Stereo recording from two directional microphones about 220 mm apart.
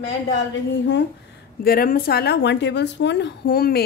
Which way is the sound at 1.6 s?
40° left (ahead or behind).